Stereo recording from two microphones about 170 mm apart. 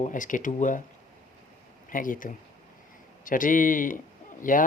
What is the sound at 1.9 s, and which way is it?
Speech, 50° left (ahead or behind).